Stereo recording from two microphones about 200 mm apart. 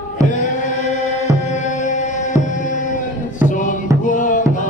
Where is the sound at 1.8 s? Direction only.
40° left (ahead or behind).